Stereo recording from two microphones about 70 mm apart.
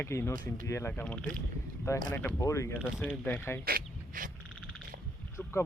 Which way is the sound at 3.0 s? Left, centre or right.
Left.